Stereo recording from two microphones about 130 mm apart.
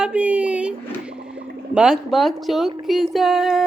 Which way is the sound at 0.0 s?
10° right (ahead or behind).